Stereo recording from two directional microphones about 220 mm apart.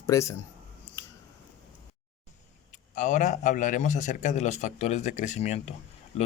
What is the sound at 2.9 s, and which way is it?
A man's voice, 35° left (ahead or behind).